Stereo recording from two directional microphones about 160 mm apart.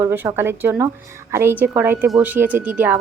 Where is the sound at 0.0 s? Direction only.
15° right (ahead or behind).